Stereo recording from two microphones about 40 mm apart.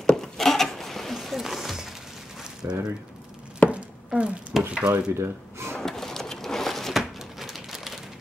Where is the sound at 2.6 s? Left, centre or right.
Right.